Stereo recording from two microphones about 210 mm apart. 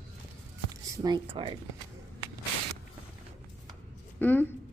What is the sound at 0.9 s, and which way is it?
Speech, 20° right (ahead or behind).